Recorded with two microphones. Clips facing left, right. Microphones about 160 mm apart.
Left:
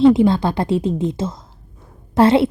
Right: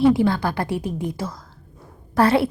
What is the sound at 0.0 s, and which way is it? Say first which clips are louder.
A woman's voice: left 5 dB; 25° left (ahead or behind).